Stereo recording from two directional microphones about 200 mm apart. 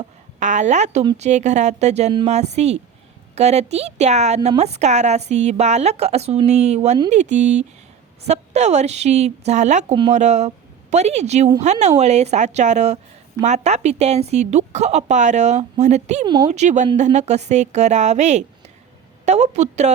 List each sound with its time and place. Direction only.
0.3 s a woman's voice: 40° right (ahead or behind)
16.2 s speech: 20° right (ahead or behind)
16.5 s a woman's voice: 35° right (ahead or behind)